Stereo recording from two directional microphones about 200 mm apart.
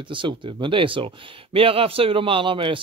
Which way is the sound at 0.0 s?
25° right (ahead or behind).